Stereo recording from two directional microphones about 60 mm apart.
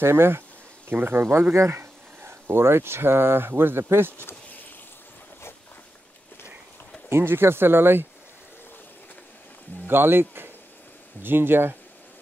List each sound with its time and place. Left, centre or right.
0.0 s speech: right
7.1 s speech: right
9.8 s speech: right